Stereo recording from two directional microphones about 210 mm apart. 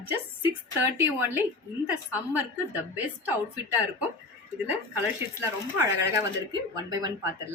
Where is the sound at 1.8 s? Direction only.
5° right (ahead or behind).